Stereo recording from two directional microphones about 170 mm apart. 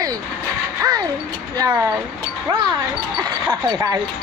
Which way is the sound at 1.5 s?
20° right (ahead or behind).